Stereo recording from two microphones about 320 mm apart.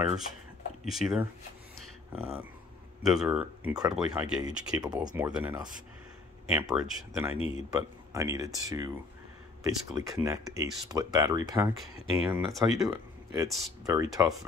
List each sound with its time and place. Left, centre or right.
0.8 s speech: centre
7.3 s speech: centre
7.7 s speech: centre